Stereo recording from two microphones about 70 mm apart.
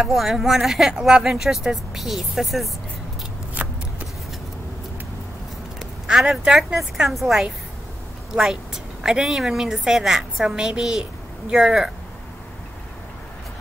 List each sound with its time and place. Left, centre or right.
0.0 s speech: centre
3.6 s shuffling cards: right
5.8 s speech: centre